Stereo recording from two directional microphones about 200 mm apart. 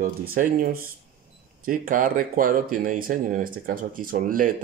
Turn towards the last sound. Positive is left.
turn(degrees=-45)  # may be behind; listen again after turning